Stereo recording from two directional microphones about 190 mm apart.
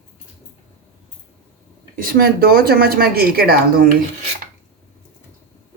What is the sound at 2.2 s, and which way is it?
Speech, 50° right (ahead or behind).